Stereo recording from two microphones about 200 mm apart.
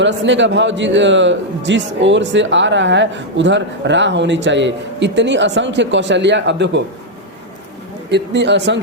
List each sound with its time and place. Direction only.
0.0 s a man's voice: 65° right (ahead or behind)
8.1 s a man's voice: 60° right (ahead or behind)